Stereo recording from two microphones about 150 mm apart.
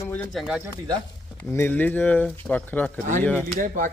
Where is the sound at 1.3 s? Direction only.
15° left (ahead or behind).